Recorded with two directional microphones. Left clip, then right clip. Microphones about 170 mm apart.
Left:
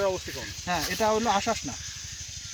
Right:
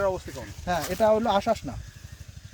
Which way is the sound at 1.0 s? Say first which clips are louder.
Right 4 dB; 30° right (ahead or behind).